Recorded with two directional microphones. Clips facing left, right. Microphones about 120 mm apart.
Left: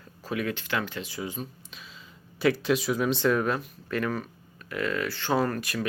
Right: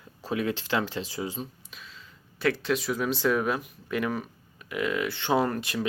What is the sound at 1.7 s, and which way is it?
Speech, 10° left (ahead or behind).